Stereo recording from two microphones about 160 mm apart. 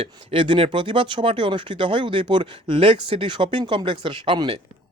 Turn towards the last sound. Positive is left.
turn(degrees=-30)  # may be behind; listen again after turning